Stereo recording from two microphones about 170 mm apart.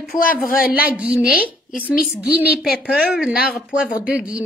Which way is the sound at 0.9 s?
10° right (ahead or behind).